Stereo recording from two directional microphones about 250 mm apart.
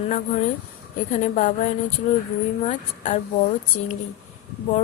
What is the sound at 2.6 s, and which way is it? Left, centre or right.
Speech, left.